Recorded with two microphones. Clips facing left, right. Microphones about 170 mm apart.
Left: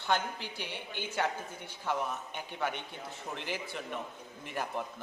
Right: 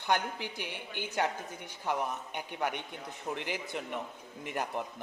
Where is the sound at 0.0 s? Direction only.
15° right (ahead or behind).